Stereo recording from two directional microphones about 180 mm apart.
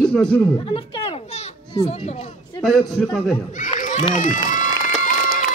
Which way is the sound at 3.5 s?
45° left (ahead or behind).